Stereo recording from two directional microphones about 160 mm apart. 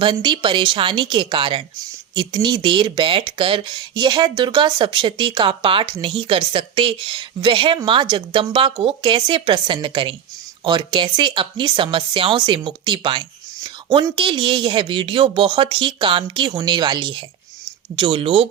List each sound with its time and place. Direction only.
0.0 s speech: 30° right (ahead or behind)